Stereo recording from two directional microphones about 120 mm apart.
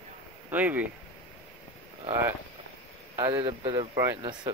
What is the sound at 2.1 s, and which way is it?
Speech, 20° right (ahead or behind).